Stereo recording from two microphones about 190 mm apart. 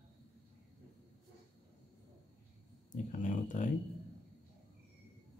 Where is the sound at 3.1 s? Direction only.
40° left (ahead or behind).